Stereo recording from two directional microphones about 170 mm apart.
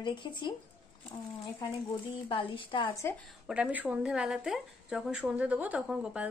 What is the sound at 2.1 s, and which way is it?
Speech, 30° left (ahead or behind).